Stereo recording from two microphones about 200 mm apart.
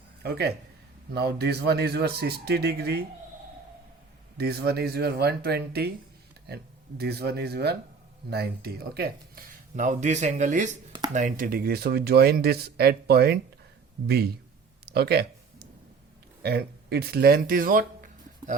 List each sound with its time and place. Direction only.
0.2 s speech: 55° right (ahead or behind)
4.4 s speech: 55° right (ahead or behind)
14.8 s a sound: 55° right (ahead or behind)
16.4 s speech: 50° right (ahead or behind)